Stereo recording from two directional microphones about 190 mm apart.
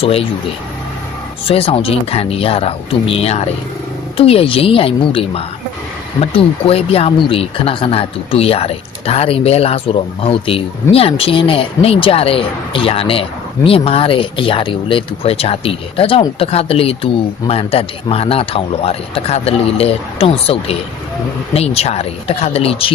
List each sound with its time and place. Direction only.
0.0 s a man's voice: 30° left (ahead or behind)
1.5 s a man's voice: 30° left (ahead or behind)